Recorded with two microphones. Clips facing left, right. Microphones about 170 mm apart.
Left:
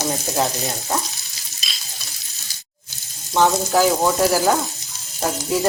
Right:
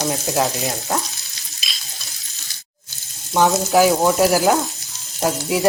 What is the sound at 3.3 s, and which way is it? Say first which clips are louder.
Frying: right 1 dB; 10° right (ahead or behind).